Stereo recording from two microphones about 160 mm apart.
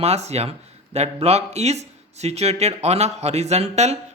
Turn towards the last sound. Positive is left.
turn(degrees=-45)  # may be behind; listen again after turning